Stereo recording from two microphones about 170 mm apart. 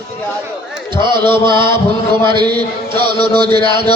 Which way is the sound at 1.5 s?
25° right (ahead or behind).